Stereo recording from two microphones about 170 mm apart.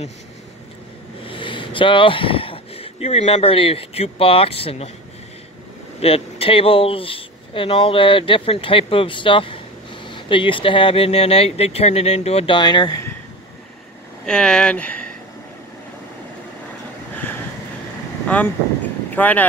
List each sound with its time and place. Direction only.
1.2 s speech: 30° left (ahead or behind)
5.9 s speech: 35° left (ahead or behind)
14.2 s speech: 5° left (ahead or behind)
19.1 s speech: 10° left (ahead or behind)